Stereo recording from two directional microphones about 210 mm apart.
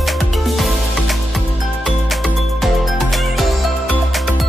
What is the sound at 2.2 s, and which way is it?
Music, centre (ahead or behind).